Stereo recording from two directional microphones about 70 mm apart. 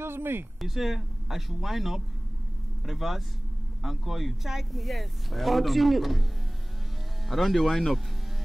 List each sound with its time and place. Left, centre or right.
0.0 s speech: right
0.6 s speech: centre
7.2 s speech: centre